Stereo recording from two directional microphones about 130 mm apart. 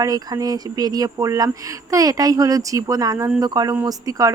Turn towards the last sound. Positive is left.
turn(degrees=-25)  # may be behind; listen again after turning